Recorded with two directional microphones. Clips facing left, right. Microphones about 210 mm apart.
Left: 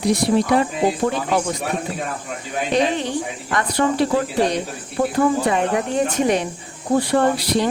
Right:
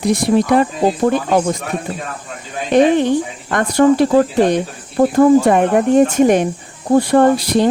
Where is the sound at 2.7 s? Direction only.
55° right (ahead or behind).